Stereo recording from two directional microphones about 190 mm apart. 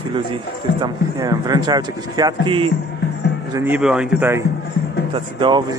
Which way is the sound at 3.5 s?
10° right (ahead or behind).